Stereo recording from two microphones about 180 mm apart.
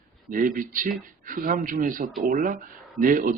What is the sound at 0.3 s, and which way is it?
Speech, 50° right (ahead or behind).